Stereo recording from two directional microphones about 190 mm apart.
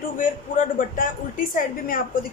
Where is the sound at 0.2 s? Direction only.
45° left (ahead or behind).